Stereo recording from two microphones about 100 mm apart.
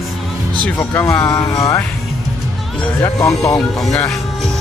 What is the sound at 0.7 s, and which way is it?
Speech, 20° left (ahead or behind).